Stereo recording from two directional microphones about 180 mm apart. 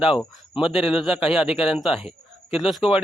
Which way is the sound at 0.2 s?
5° right (ahead or behind).